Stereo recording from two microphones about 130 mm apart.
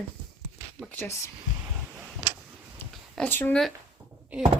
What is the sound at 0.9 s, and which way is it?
Speech, 20° left (ahead or behind).